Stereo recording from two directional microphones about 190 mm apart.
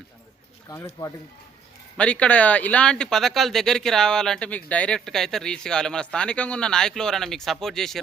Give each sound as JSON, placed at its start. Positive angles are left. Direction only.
{"t": 0.7, "sound": "speech", "side_deg": 15}
{"t": 2.0, "sound": "speech", "side_deg": 5}